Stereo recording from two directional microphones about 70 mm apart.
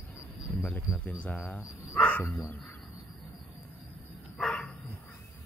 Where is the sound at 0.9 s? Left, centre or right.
Left.